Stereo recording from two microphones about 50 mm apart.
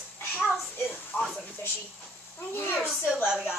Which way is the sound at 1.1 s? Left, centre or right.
Left.